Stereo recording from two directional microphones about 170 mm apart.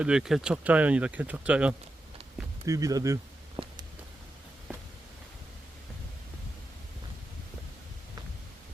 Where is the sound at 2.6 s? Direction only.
20° right (ahead or behind).